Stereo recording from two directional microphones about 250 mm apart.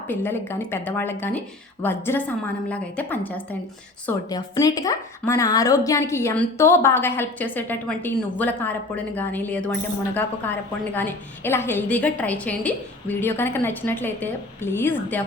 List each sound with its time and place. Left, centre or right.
0.1 s a woman's voice: centre
10.9 s a woman's voice: centre